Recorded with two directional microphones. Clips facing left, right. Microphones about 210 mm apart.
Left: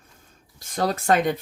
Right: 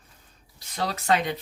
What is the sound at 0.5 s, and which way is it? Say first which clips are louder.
Speech: left 6 dB; 45° left (ahead or behind).